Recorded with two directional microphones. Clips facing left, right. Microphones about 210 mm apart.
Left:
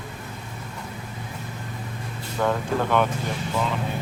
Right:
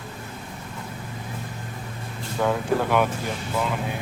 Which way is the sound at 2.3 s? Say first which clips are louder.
Right 1 dB; 5° right (ahead or behind).